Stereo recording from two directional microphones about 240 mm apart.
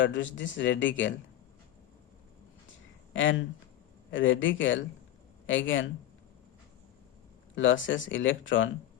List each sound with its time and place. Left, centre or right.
0.0 s speech: left
3.1 s speech: left
7.5 s speech: left